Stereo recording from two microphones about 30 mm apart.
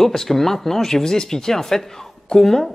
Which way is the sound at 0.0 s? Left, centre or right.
Centre.